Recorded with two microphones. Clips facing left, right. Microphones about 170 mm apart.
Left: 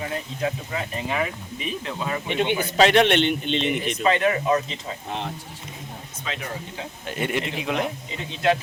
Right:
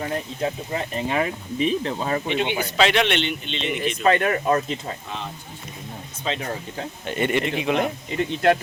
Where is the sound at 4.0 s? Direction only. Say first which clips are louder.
Right 2 dB; 50° right (ahead or behind).